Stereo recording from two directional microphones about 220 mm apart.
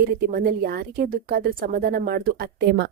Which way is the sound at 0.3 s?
40° right (ahead or behind).